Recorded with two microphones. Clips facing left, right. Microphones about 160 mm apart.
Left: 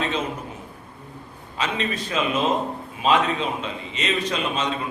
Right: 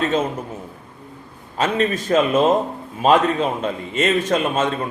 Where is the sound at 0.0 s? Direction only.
45° right (ahead or behind).